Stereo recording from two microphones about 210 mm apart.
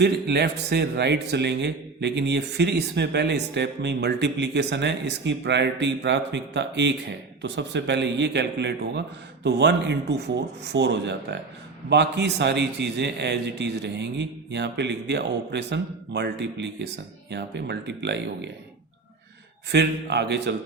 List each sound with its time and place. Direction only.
0.0 s a man's voice: 50° right (ahead or behind)
19.7 s a man's voice: 55° right (ahead or behind)